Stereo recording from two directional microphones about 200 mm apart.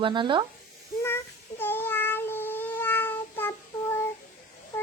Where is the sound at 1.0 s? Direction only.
10° left (ahead or behind).